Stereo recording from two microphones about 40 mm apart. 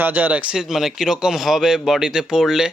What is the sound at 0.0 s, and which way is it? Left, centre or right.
Speech, right.